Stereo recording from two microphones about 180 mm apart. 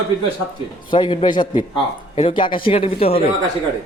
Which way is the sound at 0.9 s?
25° left (ahead or behind).